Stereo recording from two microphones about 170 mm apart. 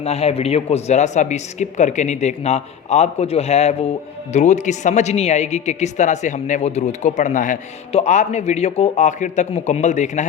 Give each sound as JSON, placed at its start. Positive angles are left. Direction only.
{"t": 0.0, "sound": "speech", "side_deg": 40}